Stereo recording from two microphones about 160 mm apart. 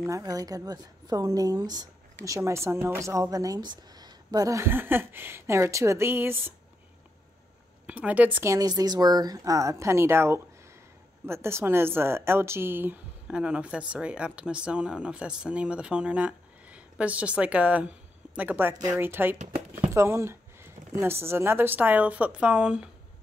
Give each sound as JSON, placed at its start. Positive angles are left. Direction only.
{"t": 0.0, "sound": "a woman's voice", "side_deg": -20}
{"t": 7.8, "sound": "speech", "side_deg": -10}
{"t": 8.5, "sound": "a woman's voice", "side_deg": -25}
{"t": 19.3, "sound": "speech", "side_deg": -50}
{"t": 19.9, "sound": "a woman's voice", "side_deg": -15}